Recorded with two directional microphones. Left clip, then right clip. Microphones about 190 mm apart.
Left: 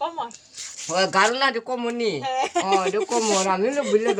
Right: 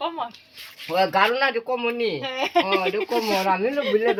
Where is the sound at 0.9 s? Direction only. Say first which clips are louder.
Even; 15° left (ahead or behind).